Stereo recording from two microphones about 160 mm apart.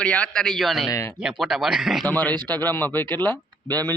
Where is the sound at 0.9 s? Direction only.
20° left (ahead or behind).